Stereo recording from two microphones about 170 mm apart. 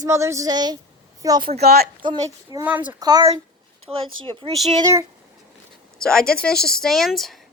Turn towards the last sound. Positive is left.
turn(degrees=0)  # may be behind; listen again after turning